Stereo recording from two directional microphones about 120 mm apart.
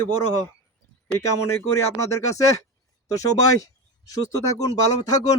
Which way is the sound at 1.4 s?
25° left (ahead or behind).